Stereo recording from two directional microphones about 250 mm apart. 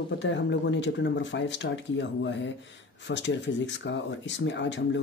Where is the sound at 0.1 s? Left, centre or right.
Left.